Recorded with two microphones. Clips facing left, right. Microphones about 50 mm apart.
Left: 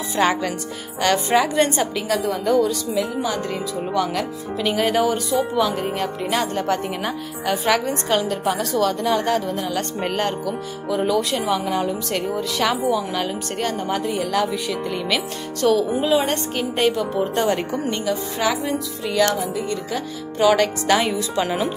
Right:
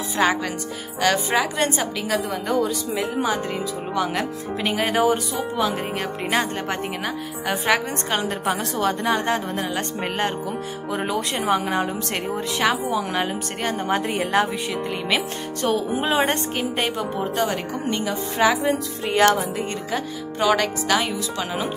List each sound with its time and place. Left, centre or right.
0.2 s a woman's voice: centre
3.0 s a woman's voice: right
10.9 s a woman's voice: right
14.0 s speech: right
14.7 s a woman's voice: right
16.0 s speech: right
16.5 s a woman's voice: centre
18.0 s a woman's voice: centre
20.3 s a woman's voice: centre